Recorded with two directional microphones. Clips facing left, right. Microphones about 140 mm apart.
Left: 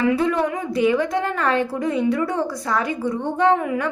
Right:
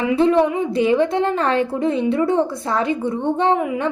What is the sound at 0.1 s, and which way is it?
A woman's voice, 25° right (ahead or behind).